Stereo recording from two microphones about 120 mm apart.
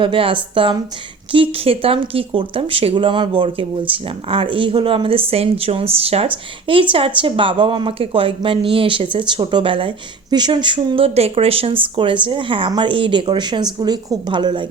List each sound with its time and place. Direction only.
0.0 s speech: 45° right (ahead or behind)